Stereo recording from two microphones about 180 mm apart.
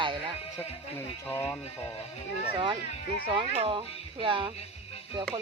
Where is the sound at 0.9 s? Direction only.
10° left (ahead or behind).